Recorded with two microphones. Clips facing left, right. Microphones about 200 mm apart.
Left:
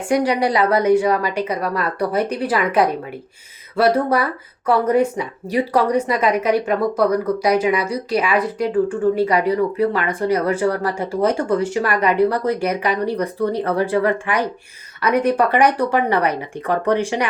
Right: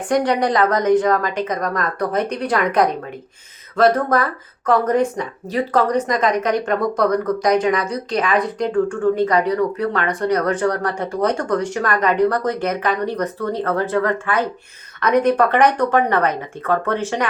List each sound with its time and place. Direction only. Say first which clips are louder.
0.1 s speech: even; 10° left (ahead or behind)